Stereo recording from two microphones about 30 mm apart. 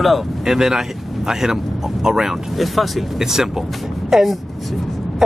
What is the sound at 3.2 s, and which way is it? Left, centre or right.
Speech, centre.